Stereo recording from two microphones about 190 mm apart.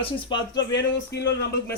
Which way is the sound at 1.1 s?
60° left (ahead or behind).